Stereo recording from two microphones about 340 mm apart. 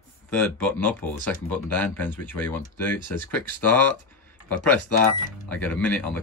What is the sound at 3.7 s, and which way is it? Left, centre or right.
Speech, centre.